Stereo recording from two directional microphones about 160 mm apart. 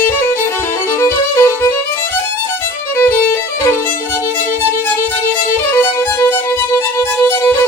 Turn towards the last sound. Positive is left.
turn(degrees=15)  # may be behind; listen again after turning